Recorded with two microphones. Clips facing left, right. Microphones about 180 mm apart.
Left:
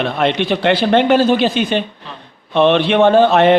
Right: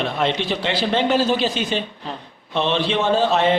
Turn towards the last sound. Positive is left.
turn(degrees=60)  # may be behind; listen again after turning